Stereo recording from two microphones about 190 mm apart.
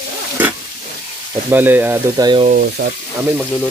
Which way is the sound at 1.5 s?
10° right (ahead or behind).